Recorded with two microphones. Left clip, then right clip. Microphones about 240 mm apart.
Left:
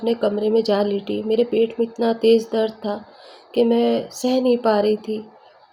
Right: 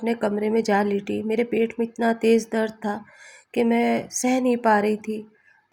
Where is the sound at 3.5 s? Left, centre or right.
Right.